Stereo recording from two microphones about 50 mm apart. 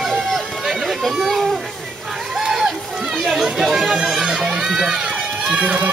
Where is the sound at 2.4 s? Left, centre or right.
Centre.